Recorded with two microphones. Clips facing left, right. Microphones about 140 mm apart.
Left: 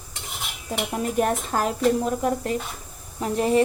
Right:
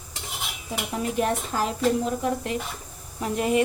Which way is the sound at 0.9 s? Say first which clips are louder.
Left 2 dB; 45° left (ahead or behind).